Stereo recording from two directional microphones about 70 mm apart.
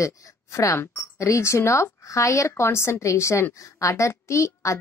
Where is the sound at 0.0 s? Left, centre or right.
Left.